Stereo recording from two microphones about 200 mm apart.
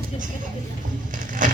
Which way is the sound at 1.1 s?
40° right (ahead or behind).